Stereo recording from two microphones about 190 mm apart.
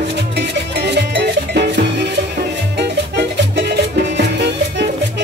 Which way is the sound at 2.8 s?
60° right (ahead or behind).